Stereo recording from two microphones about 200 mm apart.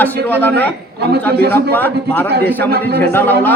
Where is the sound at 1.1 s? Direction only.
55° right (ahead or behind).